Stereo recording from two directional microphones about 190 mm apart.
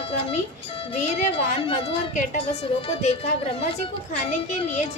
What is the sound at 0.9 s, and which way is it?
A woman's voice, 30° left (ahead or behind).